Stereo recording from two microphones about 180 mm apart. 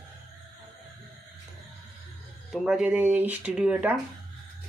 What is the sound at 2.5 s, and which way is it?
Speech, 5° right (ahead or behind).